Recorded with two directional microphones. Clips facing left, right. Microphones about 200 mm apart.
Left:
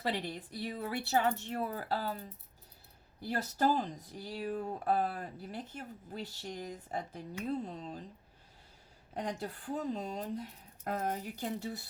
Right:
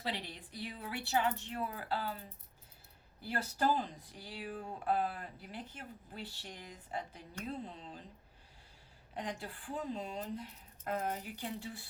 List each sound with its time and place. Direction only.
0.0 s speech: 45° left (ahead or behind)
3.2 s speech: 40° left (ahead or behind)
9.1 s speech: 40° left (ahead or behind)